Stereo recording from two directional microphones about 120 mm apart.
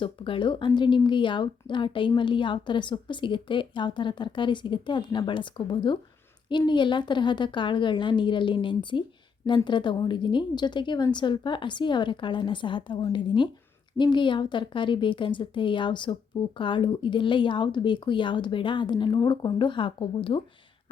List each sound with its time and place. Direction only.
0.0 s a woman's voice: 45° left (ahead or behind)